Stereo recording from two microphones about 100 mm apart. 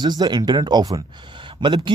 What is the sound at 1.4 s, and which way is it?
Speech, 55° right (ahead or behind).